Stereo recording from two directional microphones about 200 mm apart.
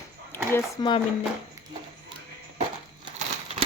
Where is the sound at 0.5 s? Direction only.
20° left (ahead or behind).